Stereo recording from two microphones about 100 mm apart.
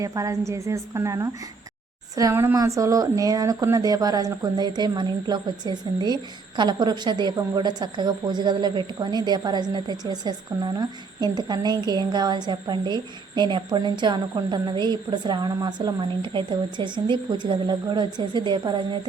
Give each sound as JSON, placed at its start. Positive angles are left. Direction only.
{"t": 0.0, "sound": "speech", "side_deg": -35}
{"t": 2.3, "sound": "a woman's voice", "side_deg": -20}